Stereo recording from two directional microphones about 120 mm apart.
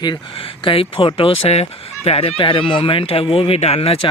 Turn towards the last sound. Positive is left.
turn(degrees=55)  # may be behind; listen again after turning